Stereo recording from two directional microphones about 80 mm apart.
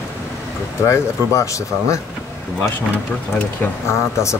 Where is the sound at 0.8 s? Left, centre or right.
Left.